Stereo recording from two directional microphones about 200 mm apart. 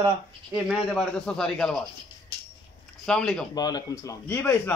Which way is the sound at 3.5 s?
20° left (ahead or behind).